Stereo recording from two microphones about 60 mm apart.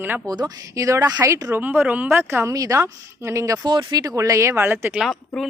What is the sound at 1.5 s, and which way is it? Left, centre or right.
Speech, right.